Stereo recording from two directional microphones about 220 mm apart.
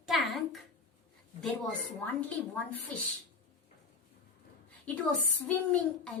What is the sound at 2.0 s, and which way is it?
A woman's voice, 10° left (ahead or behind).